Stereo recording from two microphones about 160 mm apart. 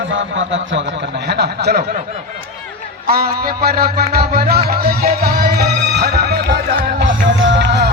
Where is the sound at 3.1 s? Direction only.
70° right (ahead or behind).